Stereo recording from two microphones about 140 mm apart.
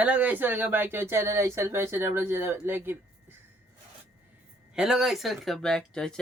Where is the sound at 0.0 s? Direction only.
10° right (ahead or behind).